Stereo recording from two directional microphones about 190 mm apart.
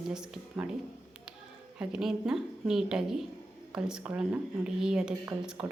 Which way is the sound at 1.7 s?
5° right (ahead or behind).